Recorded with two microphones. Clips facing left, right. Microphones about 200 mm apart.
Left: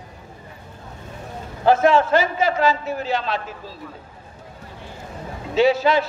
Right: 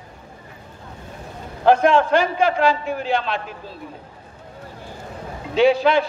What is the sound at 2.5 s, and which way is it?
Speech, 40° left (ahead or behind).